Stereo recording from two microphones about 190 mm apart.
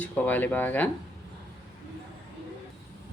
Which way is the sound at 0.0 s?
10° left (ahead or behind).